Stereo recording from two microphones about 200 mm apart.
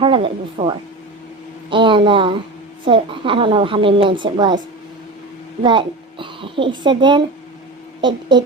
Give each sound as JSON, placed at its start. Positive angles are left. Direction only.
{"t": 0.0, "sound": "a child's voice", "side_deg": -25}
{"t": 5.6, "sound": "a child's voice", "side_deg": -25}